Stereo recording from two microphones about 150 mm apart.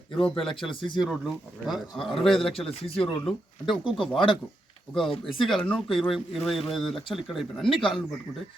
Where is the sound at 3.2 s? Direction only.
5° left (ahead or behind).